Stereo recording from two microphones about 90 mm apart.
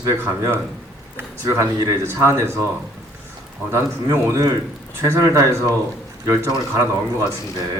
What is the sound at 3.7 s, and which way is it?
A man's voice, 30° right (ahead or behind).